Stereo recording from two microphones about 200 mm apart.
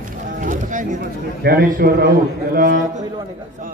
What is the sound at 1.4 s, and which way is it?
A man's voice, 50° right (ahead or behind).